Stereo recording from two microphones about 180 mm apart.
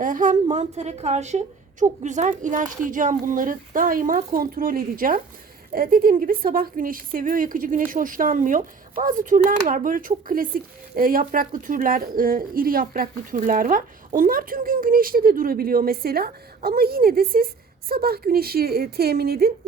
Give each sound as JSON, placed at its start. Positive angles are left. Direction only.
{"t": 0.0, "sound": "a woman's voice", "side_deg": -45}